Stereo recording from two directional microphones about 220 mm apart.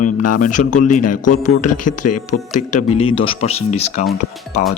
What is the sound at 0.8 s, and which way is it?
Speech, 90° left.